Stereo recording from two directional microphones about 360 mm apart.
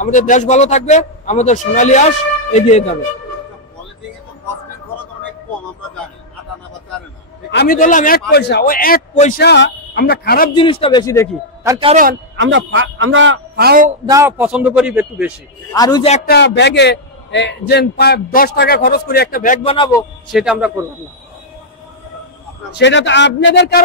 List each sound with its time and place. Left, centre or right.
0.0 s a man's voice: left
7.5 s a man's voice: left
11.6 s a man's voice: centre
14.0 s a man's voice: centre
15.7 s a man's voice: centre
20.2 s a man's voice: centre
22.8 s a man's voice: left